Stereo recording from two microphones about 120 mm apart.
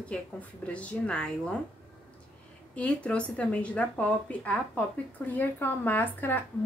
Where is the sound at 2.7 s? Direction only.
10° left (ahead or behind).